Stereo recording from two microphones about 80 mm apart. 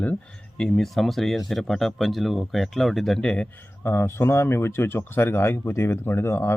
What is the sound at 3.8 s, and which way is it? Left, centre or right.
Speech, left.